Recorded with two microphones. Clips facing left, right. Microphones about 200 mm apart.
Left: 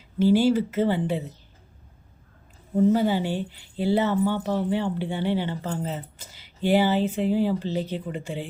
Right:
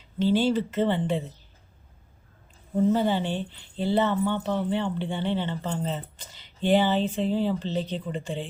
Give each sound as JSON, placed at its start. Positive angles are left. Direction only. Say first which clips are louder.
{"t": 0.2, "sound": "speech", "louder": "left 3 dB", "side_deg": 10}
{"t": 2.9, "sound": "speech", "louder": "left 2 dB", "side_deg": 10}